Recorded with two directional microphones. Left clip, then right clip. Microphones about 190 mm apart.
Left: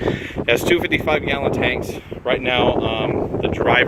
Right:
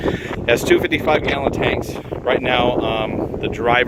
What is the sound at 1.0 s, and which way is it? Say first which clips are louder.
Speech: right 2 dB; 15° right (ahead or behind).